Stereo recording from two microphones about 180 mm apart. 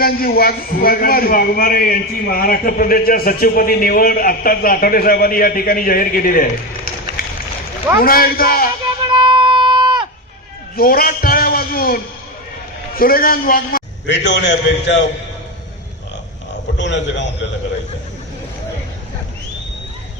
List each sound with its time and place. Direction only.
0.0 s a man's voice: 55° left (ahead or behind)
7.2 s run: 55° left (ahead or behind)
7.9 s a man's voice: 55° left (ahead or behind)
9.1 s a sound: 25° right (ahead or behind)
10.8 s a man's voice: 55° left (ahead or behind)
13.0 s a man's voice: 55° left (ahead or behind)
14.3 s a man's voice: 80° left
16.7 s a sound: 80° left